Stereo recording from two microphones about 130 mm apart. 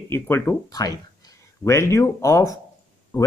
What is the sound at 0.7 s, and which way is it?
Speech, 30° left (ahead or behind).